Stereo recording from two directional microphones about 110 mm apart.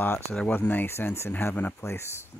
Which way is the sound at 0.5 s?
15° left (ahead or behind).